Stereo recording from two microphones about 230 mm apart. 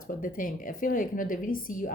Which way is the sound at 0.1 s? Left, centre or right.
Left.